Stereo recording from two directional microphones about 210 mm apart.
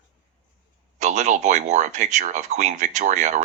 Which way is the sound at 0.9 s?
35° right (ahead or behind).